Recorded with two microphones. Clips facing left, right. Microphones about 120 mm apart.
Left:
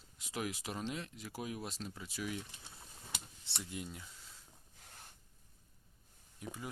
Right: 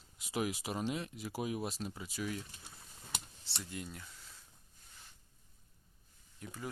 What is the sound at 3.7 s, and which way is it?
Speech, 20° left (ahead or behind).